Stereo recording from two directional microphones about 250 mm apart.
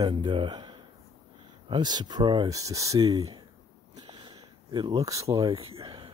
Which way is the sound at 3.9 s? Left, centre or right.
Centre.